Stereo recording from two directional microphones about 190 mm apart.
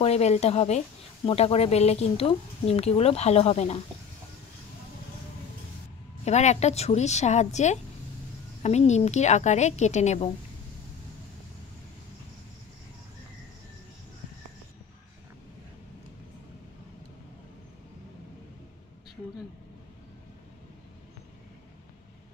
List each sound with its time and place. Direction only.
0.0 s speech: 35° left (ahead or behind)
6.2 s speech: 35° left (ahead or behind)